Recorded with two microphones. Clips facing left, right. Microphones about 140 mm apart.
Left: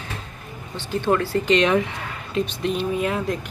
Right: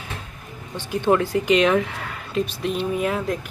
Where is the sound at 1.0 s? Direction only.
15° right (ahead or behind).